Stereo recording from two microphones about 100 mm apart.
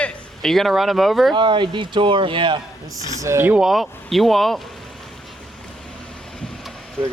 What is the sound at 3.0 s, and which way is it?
Speech, 30° right (ahead or behind).